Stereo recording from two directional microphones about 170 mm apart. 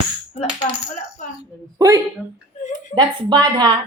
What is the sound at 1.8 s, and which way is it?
Speech, 20° right (ahead or behind).